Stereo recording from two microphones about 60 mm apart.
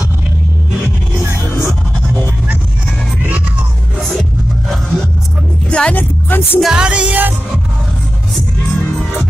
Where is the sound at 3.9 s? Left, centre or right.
Centre.